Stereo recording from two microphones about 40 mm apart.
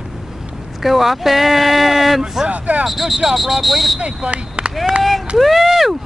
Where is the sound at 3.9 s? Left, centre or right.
Right.